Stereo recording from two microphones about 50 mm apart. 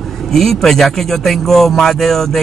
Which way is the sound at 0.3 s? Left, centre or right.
Centre.